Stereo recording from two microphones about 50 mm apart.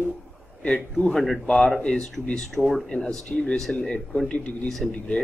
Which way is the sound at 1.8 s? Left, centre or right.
Centre.